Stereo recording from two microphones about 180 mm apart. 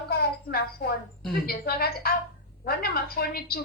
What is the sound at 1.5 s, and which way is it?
A woman's voice, 60° left (ahead or behind).